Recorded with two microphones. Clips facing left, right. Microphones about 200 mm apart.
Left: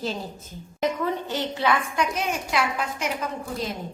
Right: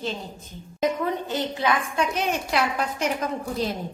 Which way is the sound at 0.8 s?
15° right (ahead or behind).